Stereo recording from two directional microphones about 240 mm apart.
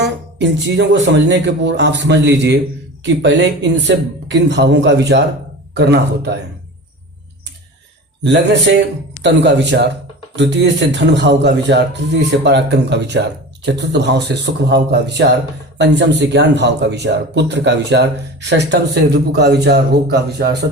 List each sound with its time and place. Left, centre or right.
0.0 s speech: right
8.2 s speech: right